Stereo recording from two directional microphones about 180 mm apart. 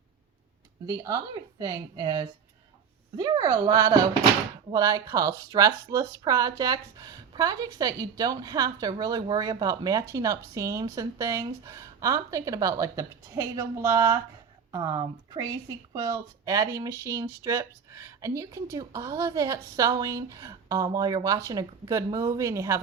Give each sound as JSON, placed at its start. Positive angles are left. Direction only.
{"t": 0.9, "sound": "speech", "side_deg": -20}